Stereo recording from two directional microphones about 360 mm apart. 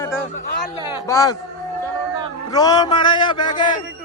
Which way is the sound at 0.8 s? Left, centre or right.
Centre.